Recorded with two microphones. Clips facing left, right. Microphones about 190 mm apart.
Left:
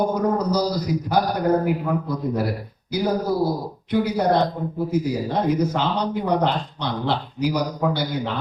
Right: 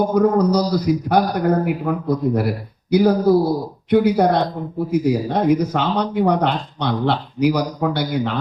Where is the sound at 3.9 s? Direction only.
60° right (ahead or behind).